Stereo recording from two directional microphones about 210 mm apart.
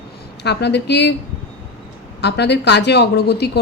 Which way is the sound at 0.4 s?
55° left (ahead or behind).